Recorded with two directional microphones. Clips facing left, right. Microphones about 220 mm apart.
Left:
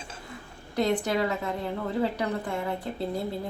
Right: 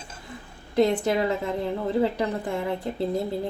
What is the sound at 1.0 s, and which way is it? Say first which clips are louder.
A woman's voice: right 3 dB; 25° right (ahead or behind).